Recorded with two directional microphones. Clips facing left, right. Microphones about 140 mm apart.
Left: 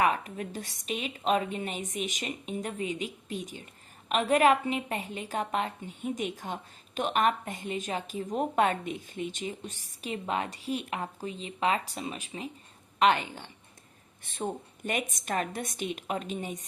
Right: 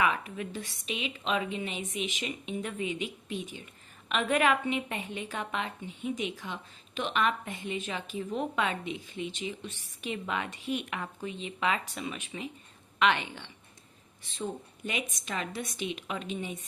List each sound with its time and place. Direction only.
0.0 s a woman's voice: 40° left (ahead or behind)
14.3 s a woman's voice: 50° left (ahead or behind)